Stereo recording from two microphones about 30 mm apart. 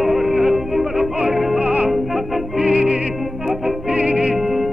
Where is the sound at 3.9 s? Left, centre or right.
Right.